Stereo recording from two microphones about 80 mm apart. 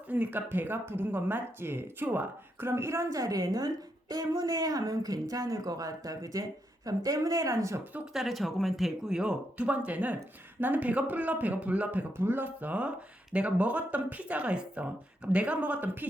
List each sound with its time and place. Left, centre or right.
0.1 s speech: right
8.1 s speech: centre; by 16.0 s right